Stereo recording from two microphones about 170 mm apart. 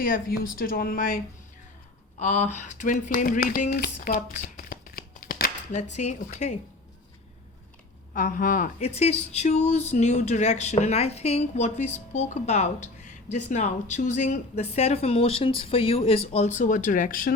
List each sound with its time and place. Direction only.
0.0 s a woman's voice: 60° left (ahead or behind)
2.1 s speech: 40° left (ahead or behind)
4.0 s shuffling cards: 55° left (ahead or behind)
5.7 s speech: 40° left (ahead or behind)
8.1 s speech: 50° left (ahead or behind)